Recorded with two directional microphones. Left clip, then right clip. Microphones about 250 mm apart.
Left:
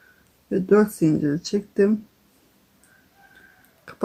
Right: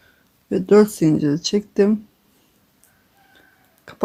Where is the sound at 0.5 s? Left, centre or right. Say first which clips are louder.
Right 4 dB; right.